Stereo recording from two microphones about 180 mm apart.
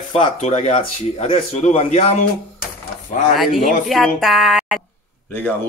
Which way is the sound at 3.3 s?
Centre (ahead or behind).